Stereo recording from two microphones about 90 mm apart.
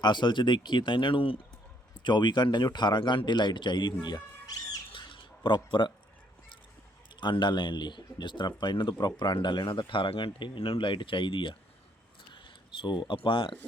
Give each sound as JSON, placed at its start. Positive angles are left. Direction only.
{"t": 0.0, "sound": "speech", "side_deg": 60}
{"t": 2.0, "sound": "speech", "side_deg": 60}
{"t": 4.0, "sound": "bird", "side_deg": 45}
{"t": 4.9, "sound": "a sound", "side_deg": 70}
{"t": 7.2, "sound": "speech", "side_deg": 60}
{"t": 12.8, "sound": "speech", "side_deg": 60}